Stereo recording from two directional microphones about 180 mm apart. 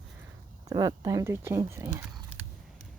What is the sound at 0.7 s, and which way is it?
Speech, 20° right (ahead or behind).